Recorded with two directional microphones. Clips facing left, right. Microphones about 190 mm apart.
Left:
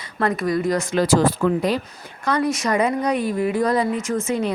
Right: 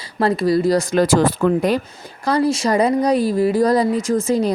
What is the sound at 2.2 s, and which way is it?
Speech, 30° right (ahead or behind).